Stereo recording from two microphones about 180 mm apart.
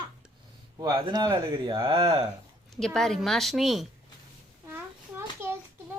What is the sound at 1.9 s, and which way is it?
Speech, 30° right (ahead or behind).